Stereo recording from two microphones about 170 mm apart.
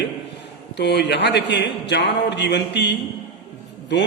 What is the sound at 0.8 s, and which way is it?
A man's voice, 80° left.